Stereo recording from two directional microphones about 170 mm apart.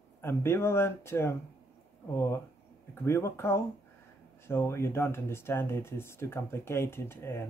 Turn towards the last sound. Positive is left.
turn(degrees=15)  # may be behind; listen again after turning